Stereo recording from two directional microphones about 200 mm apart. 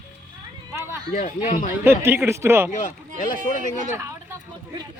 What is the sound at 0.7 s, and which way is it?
Speech, 10° right (ahead or behind).